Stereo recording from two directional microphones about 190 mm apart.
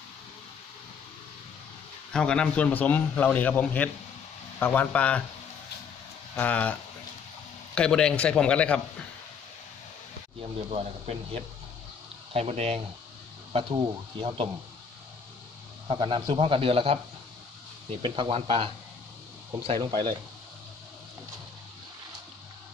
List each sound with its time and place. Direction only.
2.1 s a man's voice: 5° left (ahead or behind)
6.3 s a man's voice: 5° left (ahead or behind)
10.7 s a man's voice: 30° right (ahead or behind)
15.9 s a man's voice: 25° right (ahead or behind)